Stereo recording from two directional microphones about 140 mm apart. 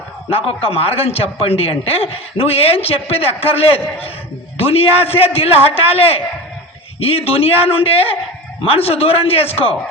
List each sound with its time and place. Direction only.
0.3 s speech: 45° left (ahead or behind)